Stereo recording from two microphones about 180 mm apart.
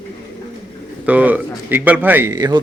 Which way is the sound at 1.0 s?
10° right (ahead or behind).